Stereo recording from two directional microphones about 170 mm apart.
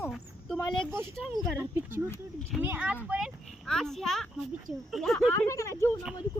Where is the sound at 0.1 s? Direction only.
Centre (ahead or behind).